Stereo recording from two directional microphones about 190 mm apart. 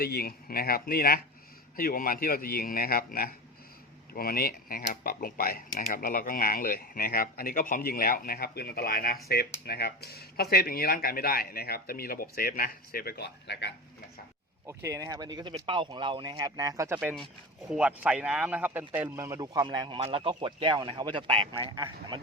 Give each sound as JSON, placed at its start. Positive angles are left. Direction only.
{"t": 0.0, "sound": "speech", "side_deg": 55}
{"t": 14.7, "sound": "a man's voice", "side_deg": -15}
{"t": 17.0, "sound": "a man's voice", "side_deg": 0}